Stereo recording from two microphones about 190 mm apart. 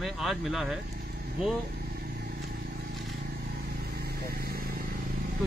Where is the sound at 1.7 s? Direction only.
55° right (ahead or behind).